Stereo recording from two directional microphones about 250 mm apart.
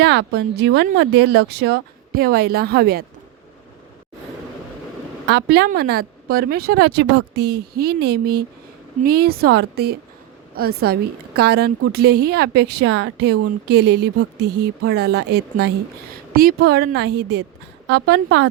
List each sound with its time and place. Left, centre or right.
0.0 s speech: right
5.3 s speech: right